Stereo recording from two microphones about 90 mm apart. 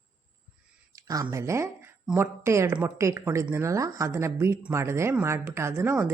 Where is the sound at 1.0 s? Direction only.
40° right (ahead or behind).